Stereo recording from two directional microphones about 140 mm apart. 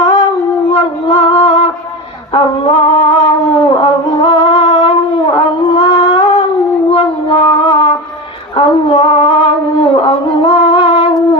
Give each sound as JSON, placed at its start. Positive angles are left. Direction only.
{"t": 0.0, "sound": "a sound", "side_deg": 35}
{"t": 3.6, "sound": "music", "side_deg": 35}
{"t": 8.5, "sound": "female singing", "side_deg": 40}